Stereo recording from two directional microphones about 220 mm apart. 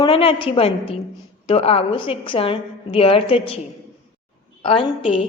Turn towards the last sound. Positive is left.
turn(degrees=25)  # may be behind; listen again after turning